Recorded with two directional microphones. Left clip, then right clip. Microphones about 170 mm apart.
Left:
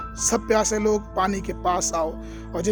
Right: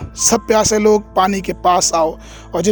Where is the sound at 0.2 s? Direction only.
45° right (ahead or behind).